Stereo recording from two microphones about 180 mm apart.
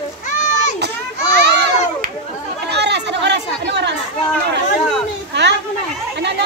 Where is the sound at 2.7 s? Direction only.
70° right (ahead or behind).